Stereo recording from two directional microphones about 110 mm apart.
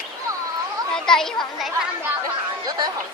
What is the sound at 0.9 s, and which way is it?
Speech, 5° left (ahead or behind).